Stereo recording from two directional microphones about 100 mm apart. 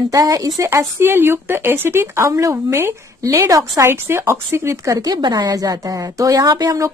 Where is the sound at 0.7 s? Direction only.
25° right (ahead or behind).